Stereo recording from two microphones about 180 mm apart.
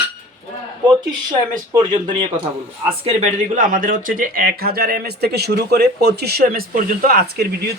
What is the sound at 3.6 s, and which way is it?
Speech, 50° right (ahead or behind).